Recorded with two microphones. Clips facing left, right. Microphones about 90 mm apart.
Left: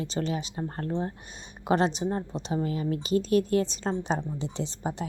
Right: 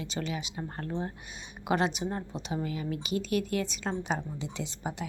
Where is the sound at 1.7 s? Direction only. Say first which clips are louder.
Left 4 dB; 35° left (ahead or behind).